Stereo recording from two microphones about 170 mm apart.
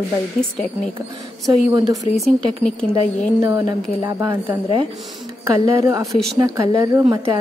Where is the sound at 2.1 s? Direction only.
5° left (ahead or behind).